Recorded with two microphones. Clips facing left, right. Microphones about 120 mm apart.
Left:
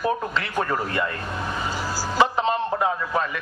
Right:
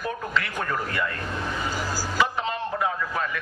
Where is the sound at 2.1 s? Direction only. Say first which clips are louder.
Left 6 dB; 30° left (ahead or behind).